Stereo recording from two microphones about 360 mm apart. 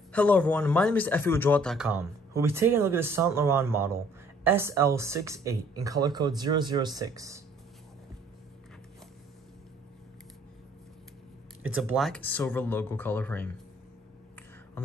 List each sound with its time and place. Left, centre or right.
0.1 s speech: centre
11.7 s speech: centre